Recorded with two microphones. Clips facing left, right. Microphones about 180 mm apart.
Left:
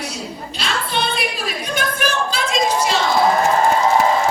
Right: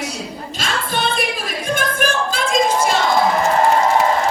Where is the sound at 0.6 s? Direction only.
45° right (ahead or behind).